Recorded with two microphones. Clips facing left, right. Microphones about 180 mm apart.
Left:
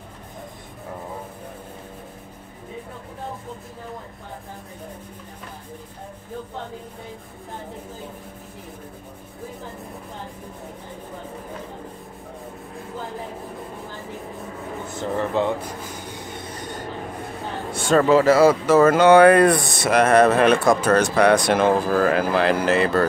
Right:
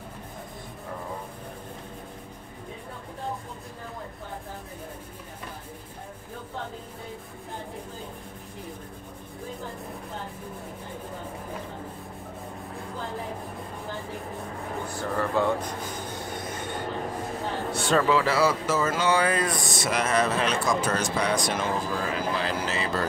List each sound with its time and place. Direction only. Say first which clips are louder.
14.9 s speech: left 4 dB; 20° left (ahead or behind)
17.7 s speech: left 7 dB; 45° left (ahead or behind)